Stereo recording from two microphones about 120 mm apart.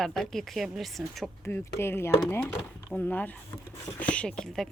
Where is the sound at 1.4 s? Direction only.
20° left (ahead or behind).